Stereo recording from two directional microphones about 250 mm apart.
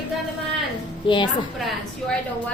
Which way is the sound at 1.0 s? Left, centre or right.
Centre.